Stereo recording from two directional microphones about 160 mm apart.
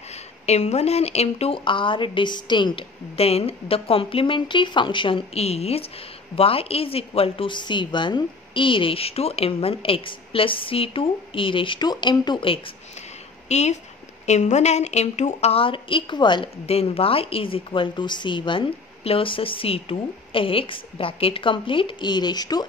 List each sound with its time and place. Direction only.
0.1 s speech: 40° left (ahead or behind)
13.5 s speech: 45° left (ahead or behind); by 22.7 s 25° left (ahead or behind)